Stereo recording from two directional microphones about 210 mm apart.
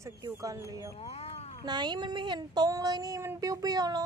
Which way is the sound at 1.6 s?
20° right (ahead or behind).